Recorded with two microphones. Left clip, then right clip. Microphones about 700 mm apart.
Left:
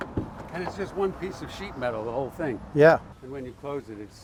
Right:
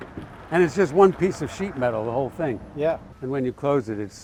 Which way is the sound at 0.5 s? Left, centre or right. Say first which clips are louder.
Right 13 dB; right.